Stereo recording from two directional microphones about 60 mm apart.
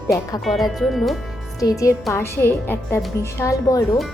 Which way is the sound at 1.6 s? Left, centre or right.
Left.